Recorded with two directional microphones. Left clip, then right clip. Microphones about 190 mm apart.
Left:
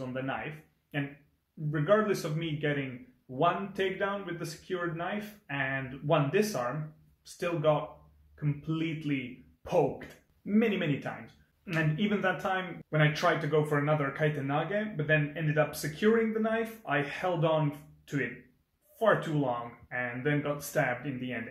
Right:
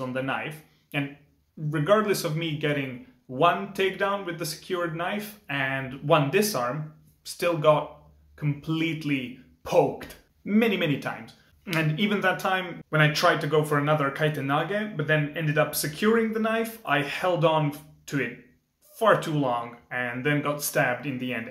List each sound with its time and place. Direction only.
0.0 s speech: 5° right (ahead or behind)
1.7 s speech: centre (ahead or behind)